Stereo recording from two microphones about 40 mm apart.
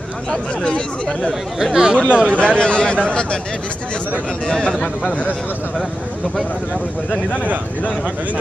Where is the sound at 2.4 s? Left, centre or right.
Left.